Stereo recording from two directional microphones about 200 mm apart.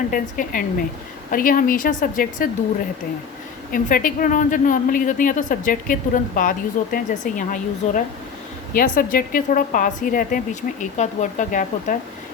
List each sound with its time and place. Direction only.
0.1 s a woman's voice: 45° left (ahead or behind)
3.7 s a woman's voice: 45° left (ahead or behind)